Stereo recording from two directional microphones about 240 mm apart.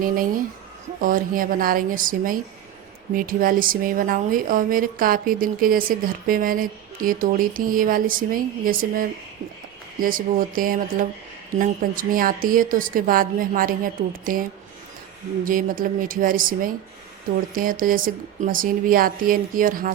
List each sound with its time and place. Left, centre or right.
0.0 s speech: right
15.4 s speech: right